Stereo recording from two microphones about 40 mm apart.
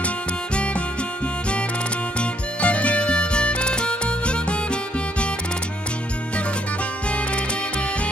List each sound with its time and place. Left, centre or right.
2.1 s music: left